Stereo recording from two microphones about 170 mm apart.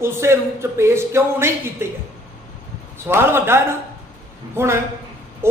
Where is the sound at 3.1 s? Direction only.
15° right (ahead or behind).